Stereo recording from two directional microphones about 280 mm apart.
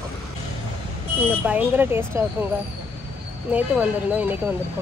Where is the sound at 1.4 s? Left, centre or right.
Centre.